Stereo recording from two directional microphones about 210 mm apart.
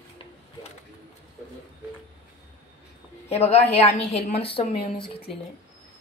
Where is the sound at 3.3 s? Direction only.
30° left (ahead or behind).